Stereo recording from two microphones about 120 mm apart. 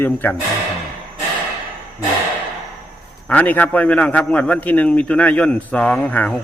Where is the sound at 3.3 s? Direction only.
10° left (ahead or behind).